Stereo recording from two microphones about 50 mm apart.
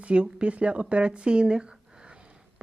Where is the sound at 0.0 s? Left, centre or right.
Right.